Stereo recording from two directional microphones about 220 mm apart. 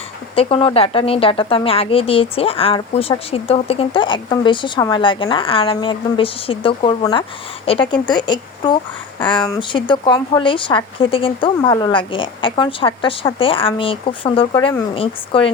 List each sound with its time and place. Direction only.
0.3 s a woman's voice: 25° left (ahead or behind)